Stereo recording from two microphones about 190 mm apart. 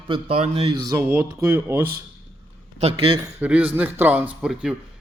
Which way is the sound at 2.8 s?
30° right (ahead or behind).